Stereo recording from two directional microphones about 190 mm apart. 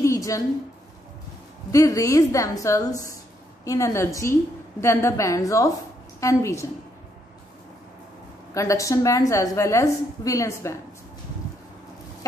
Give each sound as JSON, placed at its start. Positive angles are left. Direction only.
{"t": 0.0, "sound": "a sound", "side_deg": 15}
{"t": 1.7, "sound": "a woman's voice", "side_deg": 15}
{"t": 8.5, "sound": "a woman's voice", "side_deg": 15}